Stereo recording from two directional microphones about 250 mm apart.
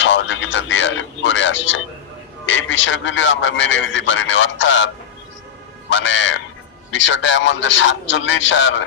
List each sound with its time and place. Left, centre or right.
0.0 s radio: left
2.5 s a man's voice: left
5.9 s a man's voice: left